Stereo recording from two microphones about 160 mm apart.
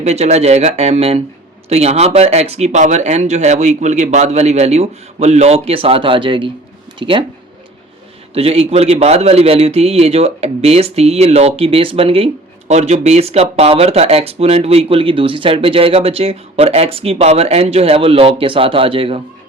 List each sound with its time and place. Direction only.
0.0 s a man's voice: 40° right (ahead or behind)
8.3 s a man's voice: 40° right (ahead or behind)